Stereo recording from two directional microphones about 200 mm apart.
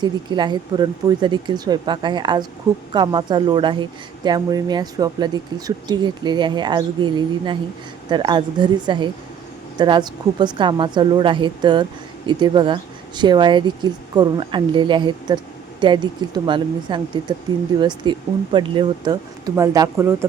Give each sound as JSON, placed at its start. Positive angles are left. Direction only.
{"t": 0.0, "sound": "a woman's voice", "side_deg": -20}